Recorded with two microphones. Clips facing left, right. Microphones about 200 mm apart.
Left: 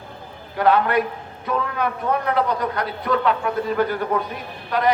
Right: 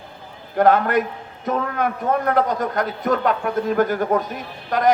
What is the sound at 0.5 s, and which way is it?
A man's voice, 45° right (ahead or behind).